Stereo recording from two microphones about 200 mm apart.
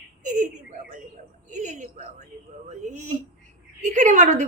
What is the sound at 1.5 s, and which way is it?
A woman's voice, 35° right (ahead or behind).